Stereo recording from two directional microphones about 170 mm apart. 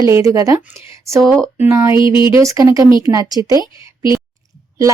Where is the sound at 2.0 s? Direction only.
30° left (ahead or behind).